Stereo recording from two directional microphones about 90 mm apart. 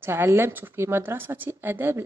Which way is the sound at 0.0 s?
25° right (ahead or behind).